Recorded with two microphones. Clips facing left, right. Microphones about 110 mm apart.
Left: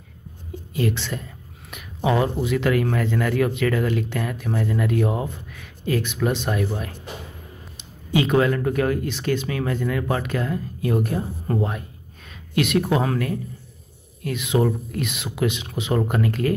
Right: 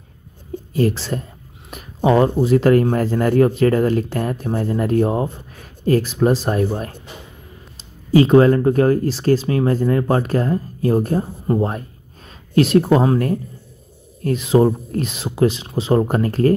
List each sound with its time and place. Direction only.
0.7 s speech: 40° right (ahead or behind)
8.1 s speech: 35° right (ahead or behind)
12.5 s speech: 35° right (ahead or behind)
14.2 s speech: 35° right (ahead or behind)